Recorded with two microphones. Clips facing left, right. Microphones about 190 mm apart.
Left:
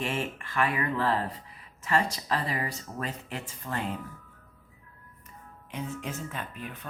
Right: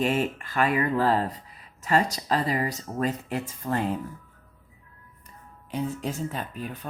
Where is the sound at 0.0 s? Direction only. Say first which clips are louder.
Right 7 dB; 40° right (ahead or behind).